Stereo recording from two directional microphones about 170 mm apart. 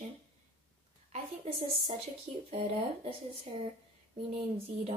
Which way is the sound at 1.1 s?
40° right (ahead or behind).